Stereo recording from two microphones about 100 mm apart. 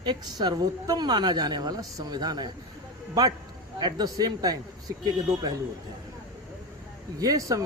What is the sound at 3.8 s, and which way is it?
Speech, 40° right (ahead or behind).